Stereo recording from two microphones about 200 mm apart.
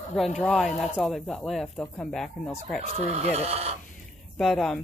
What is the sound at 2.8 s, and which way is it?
Speech, 30° right (ahead or behind).